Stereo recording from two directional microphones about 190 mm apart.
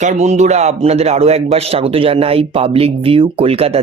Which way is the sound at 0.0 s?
40° right (ahead or behind).